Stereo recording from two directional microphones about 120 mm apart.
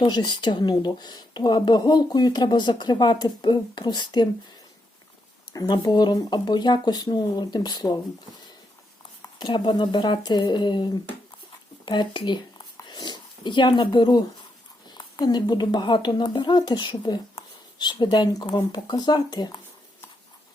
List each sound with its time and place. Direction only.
0.0 s speech: 40° left (ahead or behind)
5.5 s speech: 35° left (ahead or behind)
9.4 s speech: 40° left (ahead or behind)